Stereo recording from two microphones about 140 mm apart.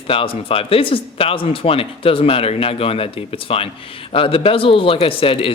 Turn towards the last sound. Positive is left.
turn(degrees=40)  # may be behind; listen again after turning